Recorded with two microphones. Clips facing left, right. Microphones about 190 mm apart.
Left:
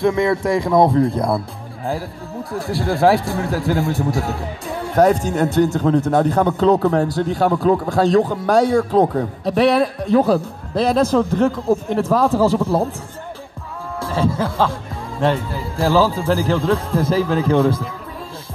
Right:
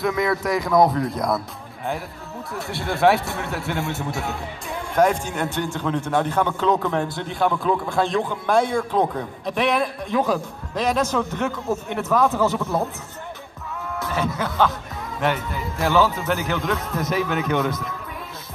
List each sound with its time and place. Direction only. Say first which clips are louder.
0.0 s speech: left 5 dB; 25° left (ahead or behind)
2.5 s speech: left 6 dB; 35° left (ahead or behind)
13.9 s speech: left 6 dB; 30° left (ahead or behind)